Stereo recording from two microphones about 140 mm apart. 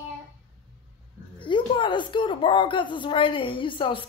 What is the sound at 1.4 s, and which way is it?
Speech, 35° left (ahead or behind).